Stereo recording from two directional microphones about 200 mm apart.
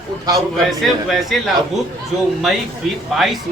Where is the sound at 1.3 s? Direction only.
Centre (ahead or behind).